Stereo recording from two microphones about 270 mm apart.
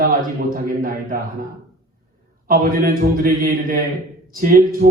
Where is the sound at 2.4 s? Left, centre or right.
Right.